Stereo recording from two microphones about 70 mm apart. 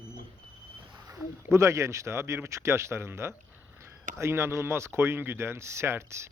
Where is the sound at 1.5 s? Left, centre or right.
Right.